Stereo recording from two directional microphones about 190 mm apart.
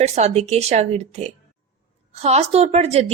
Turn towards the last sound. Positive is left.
turn(degrees=-35)  # may be behind; listen again after turning